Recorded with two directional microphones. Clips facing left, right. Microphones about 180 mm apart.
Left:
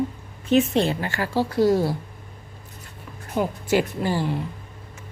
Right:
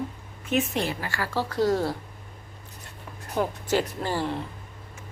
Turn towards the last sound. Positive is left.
turn(degrees=10)  # may be behind; listen again after turning